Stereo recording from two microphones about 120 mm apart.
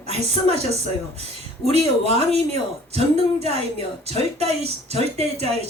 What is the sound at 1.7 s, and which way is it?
A woman's voice, 60° right (ahead or behind).